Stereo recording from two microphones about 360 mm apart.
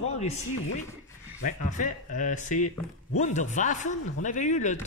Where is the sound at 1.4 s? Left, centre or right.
Left.